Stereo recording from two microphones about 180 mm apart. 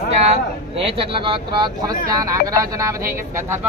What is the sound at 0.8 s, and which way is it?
Speech, 30° right (ahead or behind).